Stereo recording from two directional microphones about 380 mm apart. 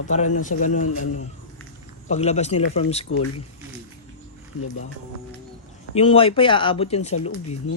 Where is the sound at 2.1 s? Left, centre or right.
Centre.